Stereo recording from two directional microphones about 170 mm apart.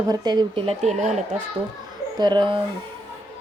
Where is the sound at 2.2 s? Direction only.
25° right (ahead or behind).